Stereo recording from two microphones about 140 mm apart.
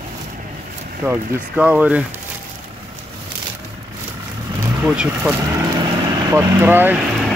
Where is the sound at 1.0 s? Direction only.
20° right (ahead or behind).